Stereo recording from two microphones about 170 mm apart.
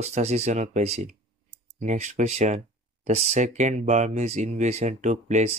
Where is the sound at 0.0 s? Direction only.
40° right (ahead or behind).